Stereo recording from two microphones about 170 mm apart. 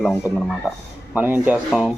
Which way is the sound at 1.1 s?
10° right (ahead or behind).